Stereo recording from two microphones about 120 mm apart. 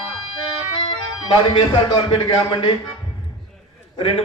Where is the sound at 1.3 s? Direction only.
40° left (ahead or behind).